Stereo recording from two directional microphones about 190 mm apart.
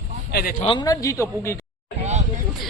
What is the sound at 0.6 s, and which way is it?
Speech, 25° left (ahead or behind).